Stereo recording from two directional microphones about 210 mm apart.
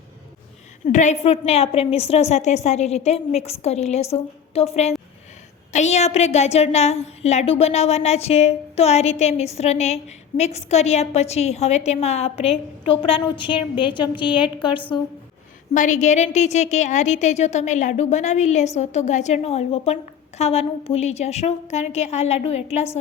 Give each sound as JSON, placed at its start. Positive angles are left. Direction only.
{"t": 0.9, "sound": "a woman's voice", "side_deg": 35}
{"t": 15.7, "sound": "a woman's voice", "side_deg": 35}